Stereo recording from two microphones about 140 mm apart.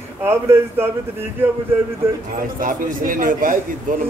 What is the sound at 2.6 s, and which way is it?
A man's voice, 75° right (ahead or behind).